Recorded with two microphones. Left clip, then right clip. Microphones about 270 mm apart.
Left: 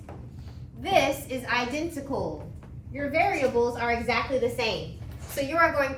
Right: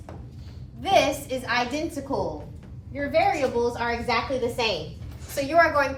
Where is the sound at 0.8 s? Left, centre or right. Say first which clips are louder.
Right 3 dB; centre.